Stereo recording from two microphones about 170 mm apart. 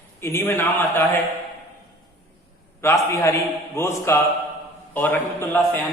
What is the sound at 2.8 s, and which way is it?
A man's voice, 15° left (ahead or behind).